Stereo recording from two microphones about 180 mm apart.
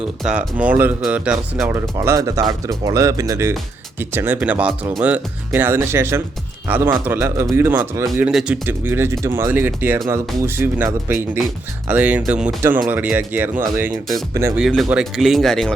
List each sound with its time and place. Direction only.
0.0 s speech: 5° right (ahead or behind)
8.6 s speech: 10° right (ahead or behind)
14.6 s speech: centre (ahead or behind)